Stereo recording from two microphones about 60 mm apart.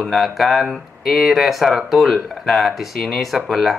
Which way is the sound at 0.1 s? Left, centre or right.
Centre.